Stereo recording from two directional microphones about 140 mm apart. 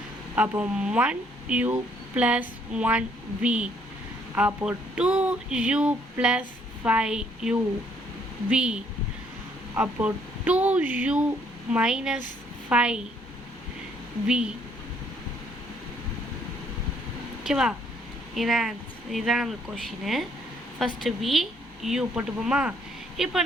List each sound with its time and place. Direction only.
0.3 s a sound: 10° right (ahead or behind)
6.8 s a woman's voice: 5° right (ahead or behind)
8.4 s a sound: 5° right (ahead or behind)
11.7 s a woman's voice: 5° right (ahead or behind)
14.3 s a woman's voice: 5° right (ahead or behind)
17.4 s a woman's voice: 5° right (ahead or behind)